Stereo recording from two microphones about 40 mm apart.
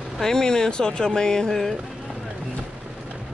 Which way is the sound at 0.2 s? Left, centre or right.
Centre.